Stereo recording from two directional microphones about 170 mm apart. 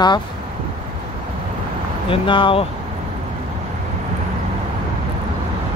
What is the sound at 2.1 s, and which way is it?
Speech, 30° left (ahead or behind).